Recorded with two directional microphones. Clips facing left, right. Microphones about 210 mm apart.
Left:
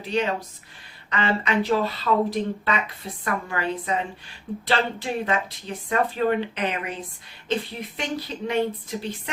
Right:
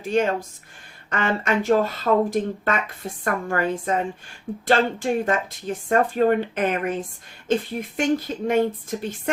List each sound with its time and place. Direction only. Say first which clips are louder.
0.0 s speech: right 4 dB; 45° right (ahead or behind)